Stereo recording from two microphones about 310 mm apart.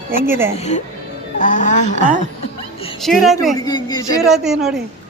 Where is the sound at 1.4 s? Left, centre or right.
Left.